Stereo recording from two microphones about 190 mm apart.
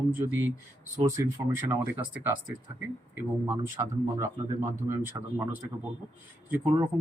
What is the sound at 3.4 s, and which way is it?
Speech, 15° right (ahead or behind).